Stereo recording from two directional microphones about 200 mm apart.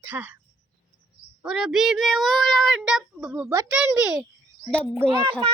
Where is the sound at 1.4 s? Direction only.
5° right (ahead or behind).